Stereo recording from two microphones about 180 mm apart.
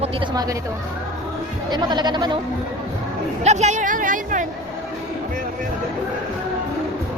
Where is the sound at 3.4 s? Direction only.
40° right (ahead or behind).